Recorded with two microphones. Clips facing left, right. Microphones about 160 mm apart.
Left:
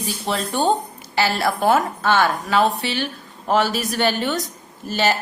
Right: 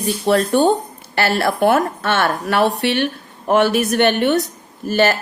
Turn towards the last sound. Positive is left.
turn(degrees=-50)  # may be behind; listen again after turning